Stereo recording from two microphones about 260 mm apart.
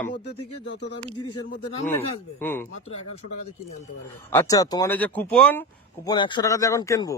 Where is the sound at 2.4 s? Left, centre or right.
Centre.